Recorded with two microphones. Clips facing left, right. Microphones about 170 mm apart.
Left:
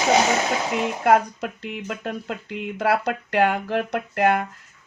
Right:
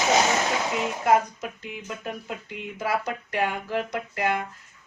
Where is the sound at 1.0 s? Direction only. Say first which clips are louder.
Left 3 dB; 65° left (ahead or behind).